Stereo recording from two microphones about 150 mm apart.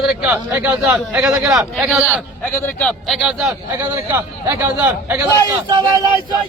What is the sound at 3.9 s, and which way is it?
A man's voice, 20° right (ahead or behind).